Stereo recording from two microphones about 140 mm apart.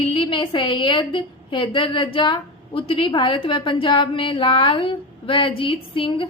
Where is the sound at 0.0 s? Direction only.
40° left (ahead or behind).